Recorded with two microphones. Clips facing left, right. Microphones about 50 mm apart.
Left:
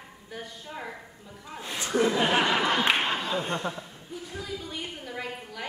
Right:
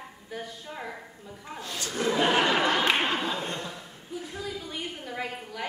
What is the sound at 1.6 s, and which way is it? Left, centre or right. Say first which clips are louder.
Speech: left 6 dB; left.